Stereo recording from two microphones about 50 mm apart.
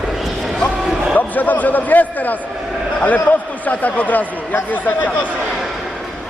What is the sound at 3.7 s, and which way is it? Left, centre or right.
Speech, left.